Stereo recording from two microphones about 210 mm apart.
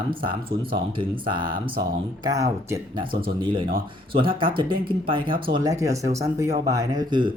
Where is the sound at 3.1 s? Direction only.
45° right (ahead or behind).